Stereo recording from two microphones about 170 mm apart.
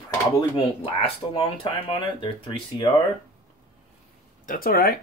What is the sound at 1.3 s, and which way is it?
Speech, 35° left (ahead or behind).